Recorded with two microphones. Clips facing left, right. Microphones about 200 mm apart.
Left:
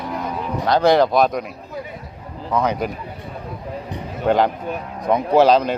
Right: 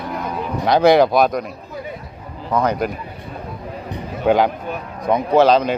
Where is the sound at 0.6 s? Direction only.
10° right (ahead or behind).